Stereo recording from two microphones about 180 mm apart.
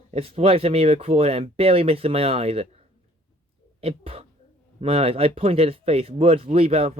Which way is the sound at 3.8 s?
35° right (ahead or behind).